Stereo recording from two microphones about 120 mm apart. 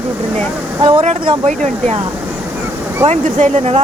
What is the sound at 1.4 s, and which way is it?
Speech, 80° right.